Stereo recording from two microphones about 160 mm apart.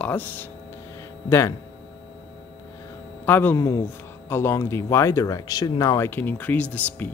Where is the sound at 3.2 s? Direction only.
15° left (ahead or behind).